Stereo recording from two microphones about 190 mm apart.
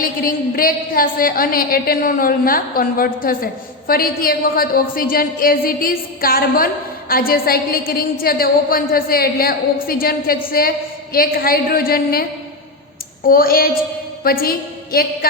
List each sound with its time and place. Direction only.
0.0 s a woman's voice: 50° left (ahead or behind)
13.2 s a woman's voice: 50° left (ahead or behind)